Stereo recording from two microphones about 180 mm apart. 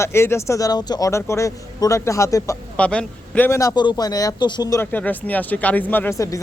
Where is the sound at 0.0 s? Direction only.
15° left (ahead or behind).